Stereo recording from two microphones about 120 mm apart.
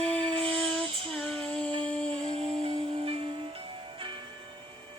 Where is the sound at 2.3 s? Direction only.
55° right (ahead or behind).